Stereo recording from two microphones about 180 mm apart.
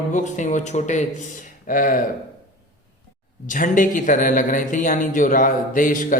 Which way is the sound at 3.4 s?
45° left (ahead or behind).